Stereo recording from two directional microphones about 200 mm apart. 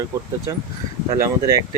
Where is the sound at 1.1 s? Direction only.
15° right (ahead or behind).